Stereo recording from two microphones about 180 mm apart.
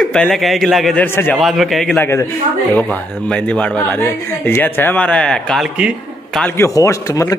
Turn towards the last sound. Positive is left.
turn(degrees=15)  # may be behind; listen again after turning